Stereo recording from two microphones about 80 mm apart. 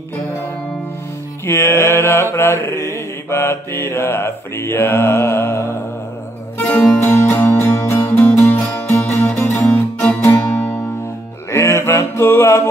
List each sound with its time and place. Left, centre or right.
1.4 s mantra: left
6.6 s music: left
11.5 s a sound: left